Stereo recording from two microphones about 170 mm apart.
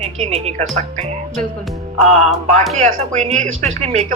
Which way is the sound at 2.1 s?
40° right (ahead or behind).